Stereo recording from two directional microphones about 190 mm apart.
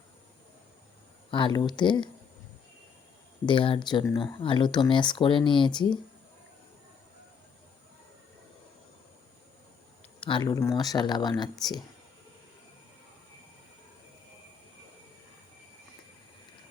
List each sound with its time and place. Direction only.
1.3 s speech: 25° left (ahead or behind)
3.4 s speech: 25° left (ahead or behind)
10.2 s speech: 25° left (ahead or behind)